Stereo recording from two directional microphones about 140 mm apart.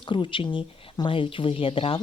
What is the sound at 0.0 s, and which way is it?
Speech, 35° left (ahead or behind).